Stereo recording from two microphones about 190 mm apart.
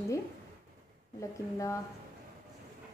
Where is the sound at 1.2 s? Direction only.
15° left (ahead or behind).